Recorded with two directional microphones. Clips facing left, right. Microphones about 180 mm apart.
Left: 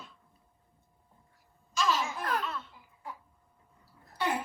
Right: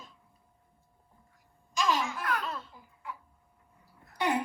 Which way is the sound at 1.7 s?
15° right (ahead or behind).